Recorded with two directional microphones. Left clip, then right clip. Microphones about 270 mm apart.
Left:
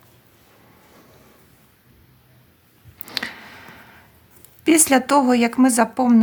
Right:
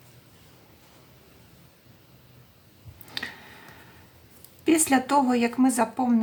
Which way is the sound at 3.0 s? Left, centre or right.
Left.